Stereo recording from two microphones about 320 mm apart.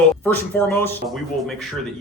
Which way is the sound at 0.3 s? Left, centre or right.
Centre.